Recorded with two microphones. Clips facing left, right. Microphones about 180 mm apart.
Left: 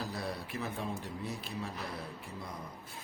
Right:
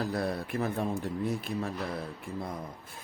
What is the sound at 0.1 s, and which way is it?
A man's voice, 55° right (ahead or behind).